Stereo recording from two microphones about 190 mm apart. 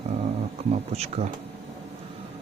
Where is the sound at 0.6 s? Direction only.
35° right (ahead or behind).